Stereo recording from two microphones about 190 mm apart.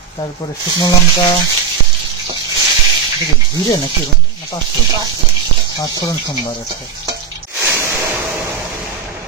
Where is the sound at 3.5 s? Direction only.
20° left (ahead or behind).